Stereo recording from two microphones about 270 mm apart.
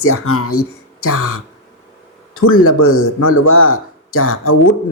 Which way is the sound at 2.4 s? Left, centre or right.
Left.